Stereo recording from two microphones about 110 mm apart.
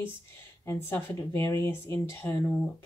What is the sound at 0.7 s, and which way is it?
A woman's voice, 20° left (ahead or behind).